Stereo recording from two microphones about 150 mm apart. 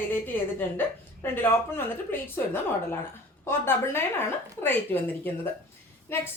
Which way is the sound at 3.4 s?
15° left (ahead or behind).